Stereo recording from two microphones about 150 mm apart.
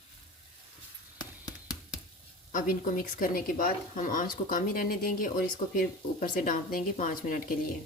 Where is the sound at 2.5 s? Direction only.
70° left (ahead or behind).